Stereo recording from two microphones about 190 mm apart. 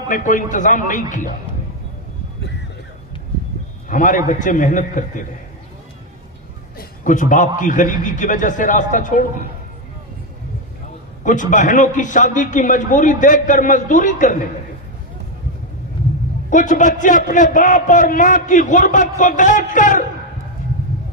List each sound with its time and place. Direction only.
0.1 s a man's voice: 45° left (ahead or behind)
3.8 s a man's voice: 45° left (ahead or behind)
6.7 s a man's voice: 45° left (ahead or behind)
11.2 s a man's voice: 40° left (ahead or behind)
16.5 s a man's voice: 40° left (ahead or behind)